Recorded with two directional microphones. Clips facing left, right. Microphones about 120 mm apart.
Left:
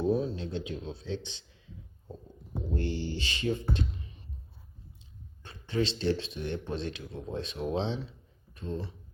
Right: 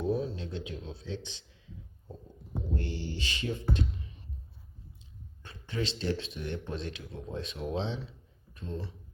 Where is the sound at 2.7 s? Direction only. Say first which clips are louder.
Left 5 dB; 30° left (ahead or behind).